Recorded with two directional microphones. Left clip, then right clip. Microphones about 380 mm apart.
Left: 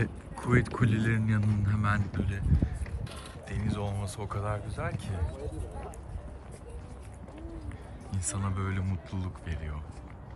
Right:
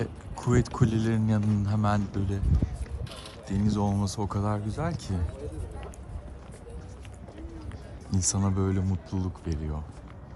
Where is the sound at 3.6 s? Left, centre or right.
Centre.